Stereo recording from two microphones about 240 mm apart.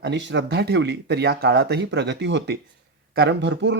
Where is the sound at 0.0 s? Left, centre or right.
Right.